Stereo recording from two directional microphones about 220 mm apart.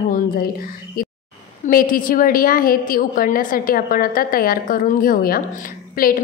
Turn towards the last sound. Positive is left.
turn(degrees=40)  # may be behind; listen again after turning